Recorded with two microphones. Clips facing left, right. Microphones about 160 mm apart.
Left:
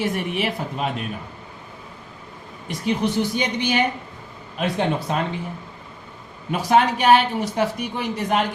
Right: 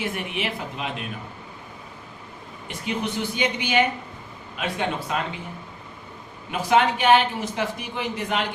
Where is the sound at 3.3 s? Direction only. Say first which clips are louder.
Left 1 dB; 40° left (ahead or behind).